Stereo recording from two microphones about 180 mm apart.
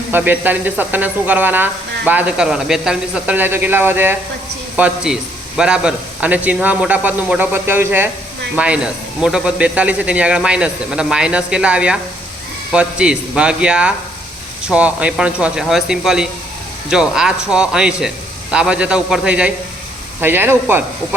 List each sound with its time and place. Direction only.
0.1 s speech: 10° right (ahead or behind)